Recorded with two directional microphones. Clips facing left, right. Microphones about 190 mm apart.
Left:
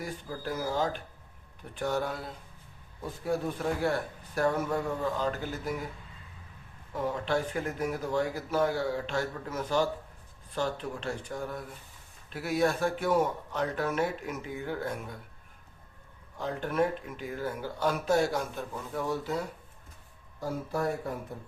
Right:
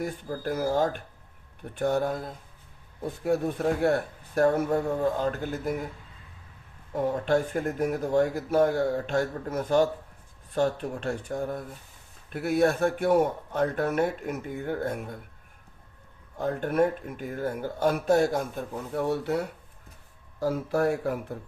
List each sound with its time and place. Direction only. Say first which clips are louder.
0.0 s speech: right 5 dB; 55° right (ahead or behind)
3.4 s speech: right 5 dB; 50° right (ahead or behind)
6.9 s speech: right 5 dB; 50° right (ahead or behind)
16.4 s speech: right 4 dB; 50° right (ahead or behind)
18.9 s speech: right 5 dB; 65° right (ahead or behind)